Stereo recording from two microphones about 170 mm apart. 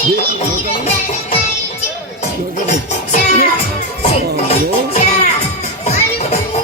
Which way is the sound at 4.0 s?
40° left (ahead or behind).